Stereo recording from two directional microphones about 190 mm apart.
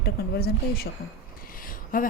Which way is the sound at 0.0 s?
55° left (ahead or behind).